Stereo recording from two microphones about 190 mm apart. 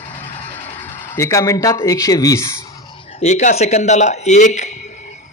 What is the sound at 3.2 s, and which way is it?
Speech, 40° left (ahead or behind).